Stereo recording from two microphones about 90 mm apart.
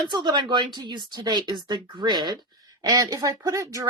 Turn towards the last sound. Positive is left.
turn(degrees=-35)  # may be behind; listen again after turning